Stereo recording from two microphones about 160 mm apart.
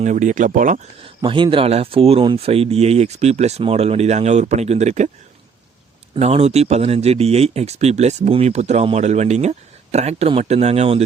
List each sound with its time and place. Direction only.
0.0 s speech: 50° right (ahead or behind)
1.0 s speech: 35° right (ahead or behind)
6.1 s speech: 40° right (ahead or behind)